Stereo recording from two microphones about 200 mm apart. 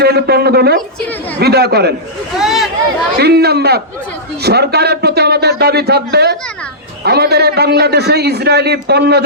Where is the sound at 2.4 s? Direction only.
Centre (ahead or behind).